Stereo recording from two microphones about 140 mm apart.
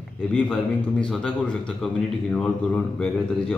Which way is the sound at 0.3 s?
10° left (ahead or behind).